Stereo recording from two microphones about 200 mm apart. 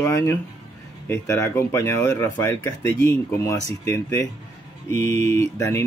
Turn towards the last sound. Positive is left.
turn(degrees=15)  # may be behind; listen again after turning